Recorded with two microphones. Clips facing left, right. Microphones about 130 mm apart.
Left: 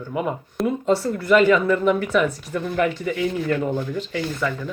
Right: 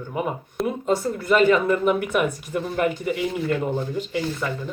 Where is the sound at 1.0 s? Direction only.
25° right (ahead or behind).